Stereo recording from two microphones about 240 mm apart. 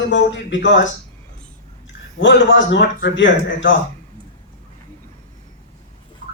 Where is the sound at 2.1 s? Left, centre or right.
Left.